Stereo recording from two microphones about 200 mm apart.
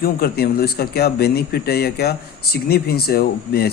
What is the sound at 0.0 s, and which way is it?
Speech, 50° left (ahead or behind).